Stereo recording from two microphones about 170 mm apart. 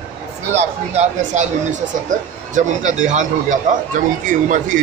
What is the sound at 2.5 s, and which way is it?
Speech, 45° right (ahead or behind).